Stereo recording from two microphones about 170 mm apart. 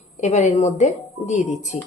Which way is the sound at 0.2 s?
40° left (ahead or behind).